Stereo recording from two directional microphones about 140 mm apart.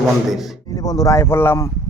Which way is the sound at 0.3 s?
Centre (ahead or behind).